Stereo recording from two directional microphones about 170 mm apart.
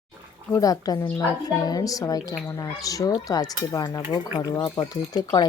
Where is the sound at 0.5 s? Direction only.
20° left (ahead or behind).